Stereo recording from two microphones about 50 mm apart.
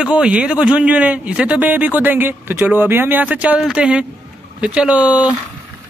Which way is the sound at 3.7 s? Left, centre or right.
Centre.